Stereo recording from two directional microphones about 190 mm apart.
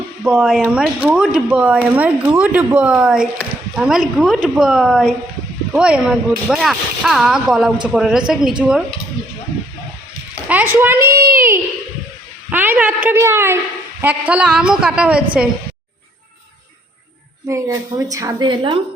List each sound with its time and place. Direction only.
0.3 s a woman's voice: centre (ahead or behind)
10.5 s a woman's voice: 10° right (ahead or behind)
17.5 s a woman's voice: 15° right (ahead or behind)